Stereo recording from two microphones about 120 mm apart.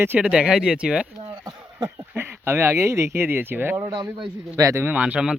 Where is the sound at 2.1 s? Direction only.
20° right (ahead or behind).